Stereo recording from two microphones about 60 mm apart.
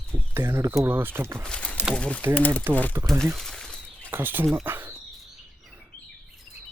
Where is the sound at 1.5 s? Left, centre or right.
Centre.